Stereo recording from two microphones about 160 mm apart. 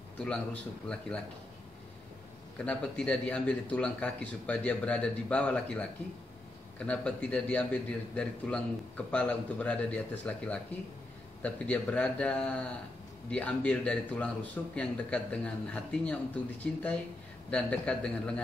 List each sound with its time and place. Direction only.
0.2 s a man's voice: 5° left (ahead or behind)
2.6 s a man's voice: 5° left (ahead or behind)